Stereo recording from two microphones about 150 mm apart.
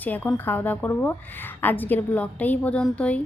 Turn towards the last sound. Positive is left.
turn(degrees=10)  # may be behind; listen again after turning